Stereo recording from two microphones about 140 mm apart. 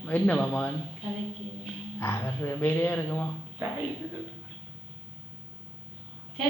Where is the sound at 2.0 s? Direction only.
15° left (ahead or behind).